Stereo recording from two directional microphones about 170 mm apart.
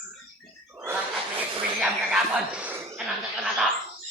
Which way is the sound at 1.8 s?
5° right (ahead or behind).